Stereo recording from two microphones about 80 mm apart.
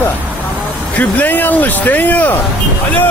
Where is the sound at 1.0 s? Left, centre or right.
Left.